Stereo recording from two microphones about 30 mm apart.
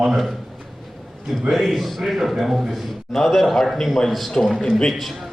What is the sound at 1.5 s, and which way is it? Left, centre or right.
A man's voice, centre.